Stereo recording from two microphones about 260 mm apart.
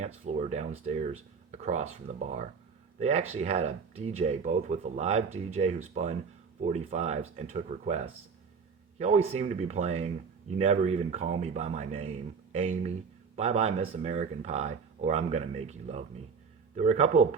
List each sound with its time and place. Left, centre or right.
0.0 s speech: right